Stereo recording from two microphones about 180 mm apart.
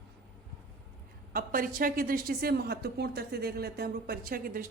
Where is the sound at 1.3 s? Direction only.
50° right (ahead or behind).